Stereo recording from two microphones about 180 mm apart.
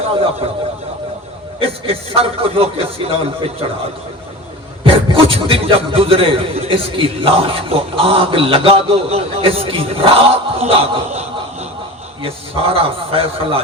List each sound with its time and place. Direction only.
1.5 s a man's voice: 30° right (ahead or behind)
4.8 s a man's voice: 30° right (ahead or behind)